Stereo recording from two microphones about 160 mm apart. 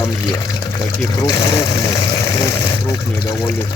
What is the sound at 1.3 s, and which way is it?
Speech, 25° left (ahead or behind).